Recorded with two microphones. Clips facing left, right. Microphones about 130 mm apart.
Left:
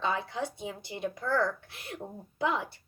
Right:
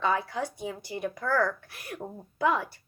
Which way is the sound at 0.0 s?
25° left (ahead or behind).